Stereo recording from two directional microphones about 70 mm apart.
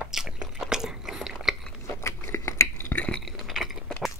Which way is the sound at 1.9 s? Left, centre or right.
Left.